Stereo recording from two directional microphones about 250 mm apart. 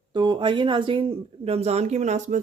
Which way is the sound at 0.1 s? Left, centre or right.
Centre.